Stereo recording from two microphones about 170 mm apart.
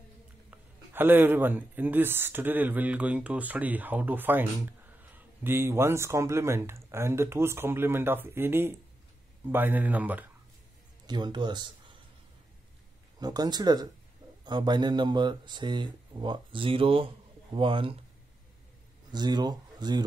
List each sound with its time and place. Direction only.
0.5 s speech: 10° right (ahead or behind)
11.1 s speech: 25° right (ahead or behind)
13.2 s speech: 25° right (ahead or behind)
19.1 s speech: 25° right (ahead or behind)